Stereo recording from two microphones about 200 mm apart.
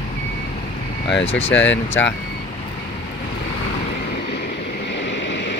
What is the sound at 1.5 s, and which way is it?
Speech, 65° left (ahead or behind).